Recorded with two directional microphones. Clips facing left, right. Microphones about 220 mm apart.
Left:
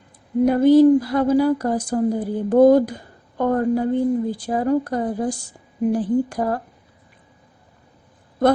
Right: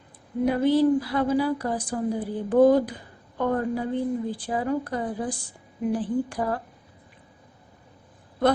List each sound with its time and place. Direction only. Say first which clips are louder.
0.4 s a woman's voice: left 8 dB; 45° left (ahead or behind)